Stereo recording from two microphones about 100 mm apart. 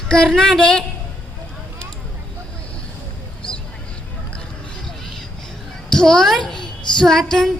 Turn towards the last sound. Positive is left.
turn(degrees=5)  # may be behind; listen again after turning